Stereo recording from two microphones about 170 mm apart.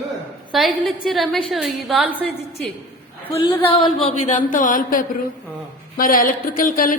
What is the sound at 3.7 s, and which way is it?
A woman's voice, 35° left (ahead or behind).